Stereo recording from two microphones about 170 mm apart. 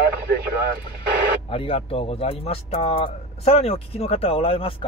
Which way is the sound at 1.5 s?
30° left (ahead or behind).